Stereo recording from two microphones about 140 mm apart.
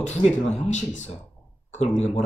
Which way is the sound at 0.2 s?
5° left (ahead or behind).